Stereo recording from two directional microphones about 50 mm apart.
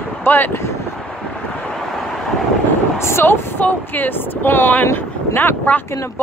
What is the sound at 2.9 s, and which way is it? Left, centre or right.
Speech, left.